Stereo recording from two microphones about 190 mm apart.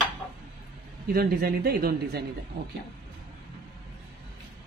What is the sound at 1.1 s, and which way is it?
A man's voice, 50° right (ahead or behind).